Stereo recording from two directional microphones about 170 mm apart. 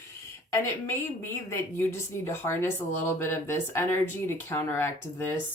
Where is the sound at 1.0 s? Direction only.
15° left (ahead or behind).